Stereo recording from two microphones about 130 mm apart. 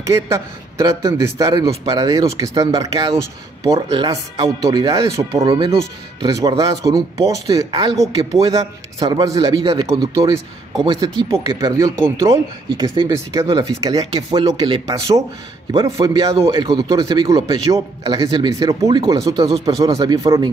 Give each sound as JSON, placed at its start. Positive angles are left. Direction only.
{"t": 0.0, "sound": "speech", "side_deg": -20}
{"t": 4.1, "sound": "speech", "side_deg": -25}
{"t": 12.6, "sound": "speech", "side_deg": -35}